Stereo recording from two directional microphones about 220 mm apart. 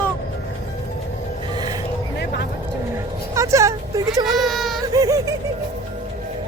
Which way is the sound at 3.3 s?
15° right (ahead or behind).